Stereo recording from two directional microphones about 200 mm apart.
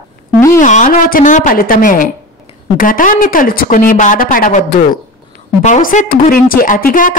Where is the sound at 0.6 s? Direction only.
40° left (ahead or behind).